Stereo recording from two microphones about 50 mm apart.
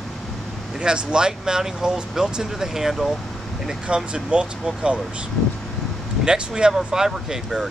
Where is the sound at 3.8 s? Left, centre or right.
Centre.